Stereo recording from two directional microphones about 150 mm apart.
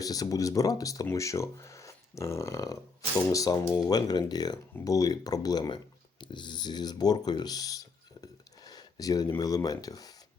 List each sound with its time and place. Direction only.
0.0 s speech: 25° left (ahead or behind)